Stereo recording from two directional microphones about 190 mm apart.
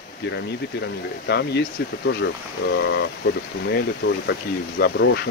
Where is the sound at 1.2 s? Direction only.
60° left (ahead or behind).